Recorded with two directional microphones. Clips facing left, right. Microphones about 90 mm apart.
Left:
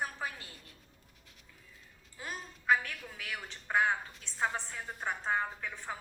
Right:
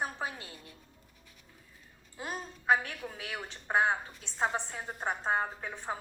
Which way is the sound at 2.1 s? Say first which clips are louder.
Right 4 dB; 25° right (ahead or behind).